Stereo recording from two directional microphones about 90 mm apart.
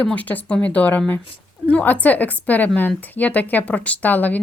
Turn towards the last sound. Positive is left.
turn(degrees=20)  # may be behind; listen again after turning